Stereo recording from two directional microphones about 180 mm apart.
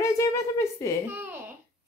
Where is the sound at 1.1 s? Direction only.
10° right (ahead or behind).